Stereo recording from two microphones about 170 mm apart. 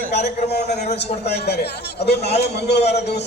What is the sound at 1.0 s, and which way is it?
A man's voice, 75° left (ahead or behind).